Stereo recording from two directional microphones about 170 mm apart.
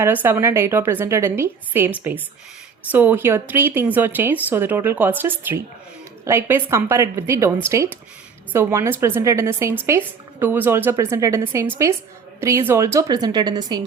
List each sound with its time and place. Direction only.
0.0 s a woman's voice: 10° right (ahead or behind)
8.5 s a woman's voice: 15° right (ahead or behind)